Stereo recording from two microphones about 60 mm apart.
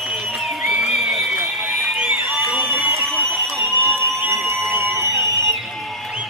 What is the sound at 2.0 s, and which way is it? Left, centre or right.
Crowd, right.